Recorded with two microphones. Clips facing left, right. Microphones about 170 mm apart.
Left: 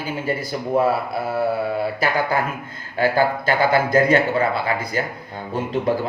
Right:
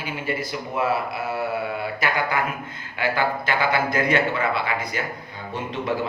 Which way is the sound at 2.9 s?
40° left (ahead or behind).